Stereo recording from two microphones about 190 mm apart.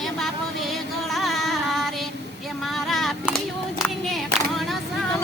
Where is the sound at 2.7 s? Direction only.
Centre (ahead or behind).